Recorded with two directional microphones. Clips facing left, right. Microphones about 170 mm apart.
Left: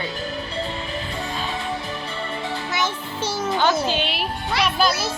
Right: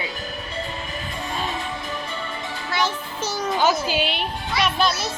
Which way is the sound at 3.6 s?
10° right (ahead or behind).